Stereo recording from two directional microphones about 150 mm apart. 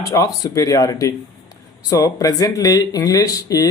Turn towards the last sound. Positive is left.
turn(degrees=25)  # may be behind; listen again after turning